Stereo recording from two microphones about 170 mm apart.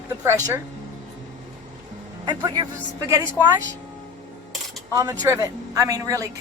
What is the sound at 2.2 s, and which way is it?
Speech, 25° right (ahead or behind).